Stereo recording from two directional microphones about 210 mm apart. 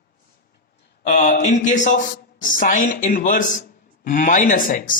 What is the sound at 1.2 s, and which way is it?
A man's voice, 35° left (ahead or behind).